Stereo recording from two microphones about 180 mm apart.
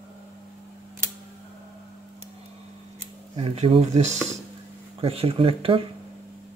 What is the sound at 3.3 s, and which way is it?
Speech, 30° right (ahead or behind).